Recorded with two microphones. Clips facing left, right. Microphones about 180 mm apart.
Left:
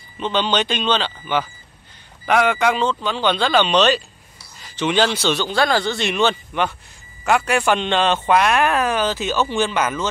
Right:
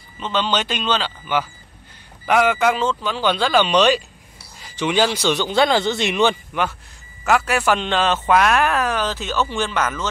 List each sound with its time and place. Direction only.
0.2 s speech: 10° right (ahead or behind)
6.5 s speech: 5° right (ahead or behind)